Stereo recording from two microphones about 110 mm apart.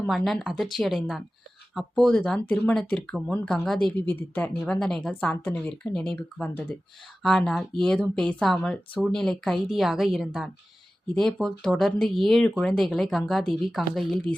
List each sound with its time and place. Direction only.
0.3 s speech: centre (ahead or behind)
3.9 s speech: 15° left (ahead or behind)
5.3 s speech: 15° left (ahead or behind); by 14.3 s centre (ahead or behind)